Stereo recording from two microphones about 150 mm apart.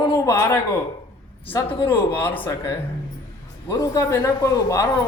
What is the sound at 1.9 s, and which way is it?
Speech, 10° left (ahead or behind).